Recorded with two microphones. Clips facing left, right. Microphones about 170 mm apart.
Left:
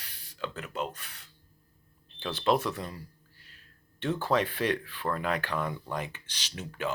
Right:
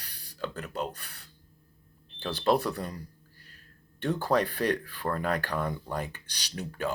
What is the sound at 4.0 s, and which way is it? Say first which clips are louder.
Speech: right 1 dB; 40° right (ahead or behind).